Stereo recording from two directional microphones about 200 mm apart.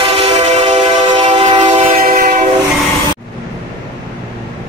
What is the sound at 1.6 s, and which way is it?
Train, 35° right (ahead or behind).